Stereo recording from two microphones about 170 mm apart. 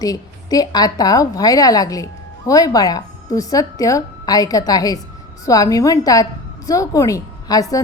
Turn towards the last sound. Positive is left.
turn(degrees=20)  # may be behind; listen again after turning